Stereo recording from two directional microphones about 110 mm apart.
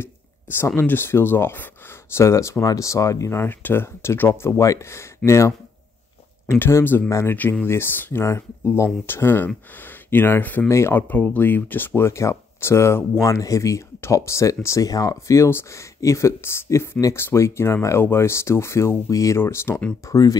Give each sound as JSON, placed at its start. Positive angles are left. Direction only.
{"t": 0.0, "sound": "speech", "side_deg": 20}
{"t": 20.1, "sound": "speech", "side_deg": 30}